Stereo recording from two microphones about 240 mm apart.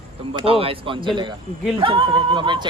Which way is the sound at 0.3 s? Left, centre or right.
Right.